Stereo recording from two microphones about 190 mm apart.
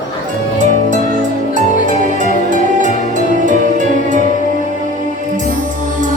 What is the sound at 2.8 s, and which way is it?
Music, 40° right (ahead or behind).